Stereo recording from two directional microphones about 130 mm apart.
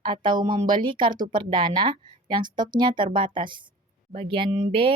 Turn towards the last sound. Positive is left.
turn(degrees=-40)  # may be behind; listen again after turning